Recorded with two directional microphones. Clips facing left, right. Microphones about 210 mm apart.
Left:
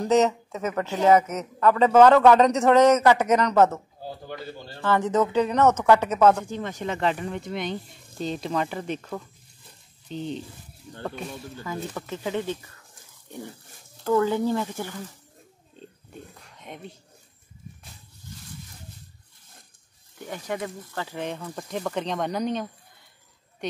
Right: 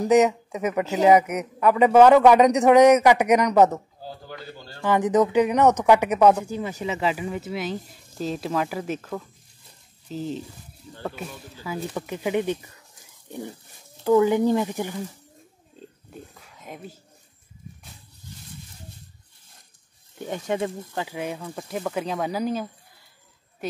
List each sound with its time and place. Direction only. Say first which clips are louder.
0.0 s a man's voice: right 3 dB; 15° right (ahead or behind)
4.8 s a man's voice: right 3 dB; 15° right (ahead or behind)
14.0 s a man's voice: right 4 dB; 15° right (ahead or behind)
15.7 s pig: right 1 dB; centre (ahead or behind)
20.2 s speech: right 5 dB; 25° right (ahead or behind)
21.0 s a woman's voice: right 1 dB; 10° right (ahead or behind)